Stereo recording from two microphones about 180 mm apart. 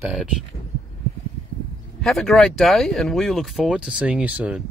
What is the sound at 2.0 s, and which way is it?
Speech, centre (ahead or behind).